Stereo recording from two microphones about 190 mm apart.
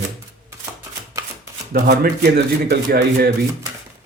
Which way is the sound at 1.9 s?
55° right (ahead or behind).